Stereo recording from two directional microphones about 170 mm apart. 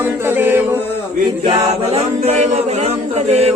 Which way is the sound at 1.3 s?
30° right (ahead or behind).